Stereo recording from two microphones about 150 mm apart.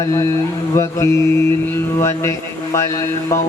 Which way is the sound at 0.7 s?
20° left (ahead or behind).